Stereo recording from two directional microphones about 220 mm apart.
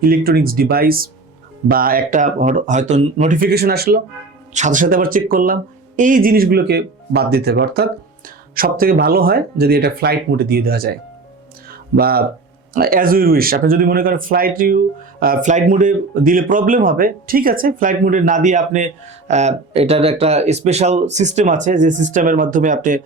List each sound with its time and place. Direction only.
0.0 s speech: 40° right (ahead or behind)
11.9 s speech: 45° right (ahead or behind)